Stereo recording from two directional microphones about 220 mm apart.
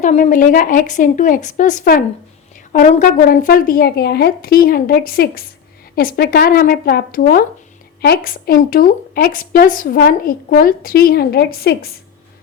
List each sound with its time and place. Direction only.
0.0 s a woman's voice: 35° left (ahead or behind)